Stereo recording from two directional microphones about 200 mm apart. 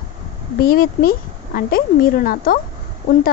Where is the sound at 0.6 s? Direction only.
45° left (ahead or behind).